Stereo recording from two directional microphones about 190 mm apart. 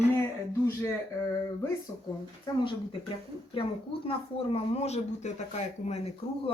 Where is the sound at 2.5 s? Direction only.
20° left (ahead or behind).